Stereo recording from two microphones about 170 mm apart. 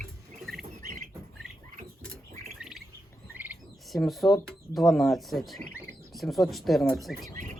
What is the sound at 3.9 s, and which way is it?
Speech, centre (ahead or behind).